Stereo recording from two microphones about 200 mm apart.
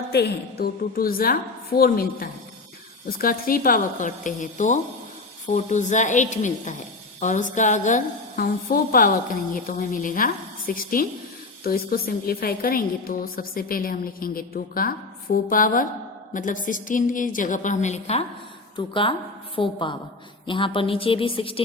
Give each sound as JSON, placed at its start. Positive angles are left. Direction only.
{"t": 0.1, "sound": "a woman's voice", "side_deg": 55}